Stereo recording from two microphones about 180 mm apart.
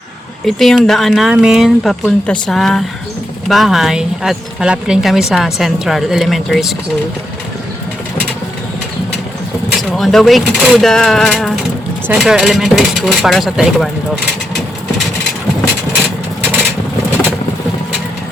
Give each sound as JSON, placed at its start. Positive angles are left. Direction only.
{"t": 0.4, "sound": "a woman's voice", "side_deg": 0}
{"t": 9.9, "sound": "a woman's voice", "side_deg": 0}